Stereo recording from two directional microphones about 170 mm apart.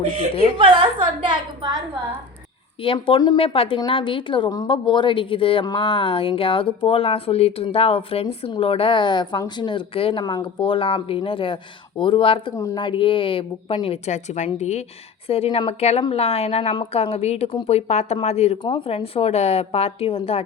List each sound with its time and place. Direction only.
0.5 s a woman's voice: 30° right (ahead or behind)
1.2 s a sound: 30° right (ahead or behind)
2.8 s a woman's voice: 30° left (ahead or behind)